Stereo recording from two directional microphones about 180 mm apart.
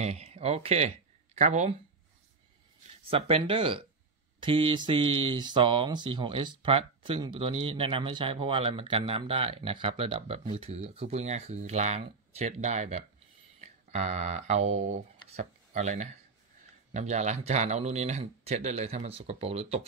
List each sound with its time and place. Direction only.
0.0 s speech: 35° right (ahead or behind)
3.1 s speech: 30° right (ahead or behind)